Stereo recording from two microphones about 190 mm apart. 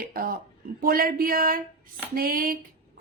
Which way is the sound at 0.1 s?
50° right (ahead or behind).